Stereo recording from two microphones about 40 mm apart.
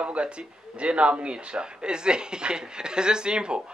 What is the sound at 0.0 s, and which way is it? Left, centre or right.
A man's voice, right.